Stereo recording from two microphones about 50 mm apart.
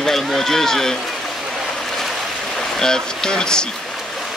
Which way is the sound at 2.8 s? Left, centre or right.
Centre.